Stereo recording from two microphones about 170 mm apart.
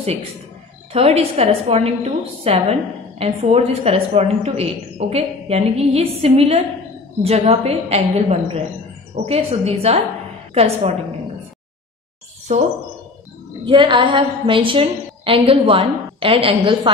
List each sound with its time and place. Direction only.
0.9 s a woman's voice: 35° right (ahead or behind)
12.5 s a woman's voice: 40° right (ahead or behind)
13.7 s a woman's voice: 30° right (ahead or behind)